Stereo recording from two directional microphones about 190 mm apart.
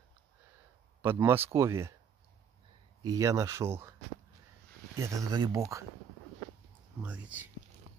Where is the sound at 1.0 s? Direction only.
10° right (ahead or behind).